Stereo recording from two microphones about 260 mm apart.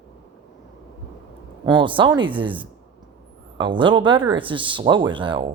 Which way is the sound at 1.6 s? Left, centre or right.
Centre.